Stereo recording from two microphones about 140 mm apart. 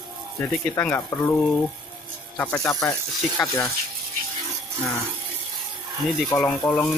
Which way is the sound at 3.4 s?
20° left (ahead or behind).